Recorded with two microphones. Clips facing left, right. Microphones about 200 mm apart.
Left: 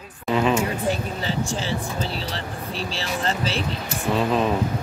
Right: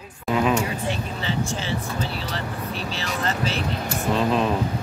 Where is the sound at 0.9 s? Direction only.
35° left (ahead or behind).